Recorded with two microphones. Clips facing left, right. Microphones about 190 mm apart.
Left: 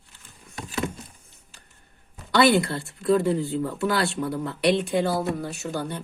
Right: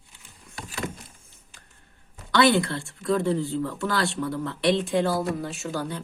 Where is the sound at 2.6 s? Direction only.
5° left (ahead or behind).